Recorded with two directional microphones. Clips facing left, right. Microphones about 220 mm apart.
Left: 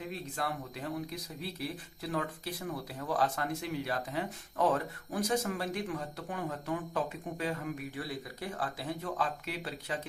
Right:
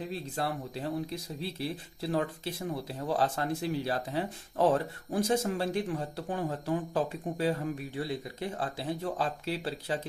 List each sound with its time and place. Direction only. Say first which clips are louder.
0.1 s speech: right 3 dB; 30° right (ahead or behind)